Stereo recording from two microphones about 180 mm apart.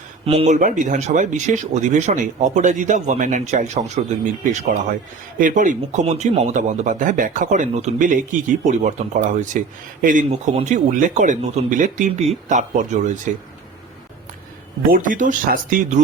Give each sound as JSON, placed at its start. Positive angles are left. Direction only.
{"t": 0.3, "sound": "speech", "side_deg": -40}
{"t": 14.8, "sound": "speech", "side_deg": -50}